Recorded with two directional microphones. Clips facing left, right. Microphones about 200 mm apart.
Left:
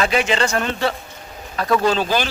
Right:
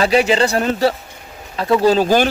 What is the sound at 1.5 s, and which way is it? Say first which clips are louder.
Speech: right 4 dB; 25° right (ahead or behind).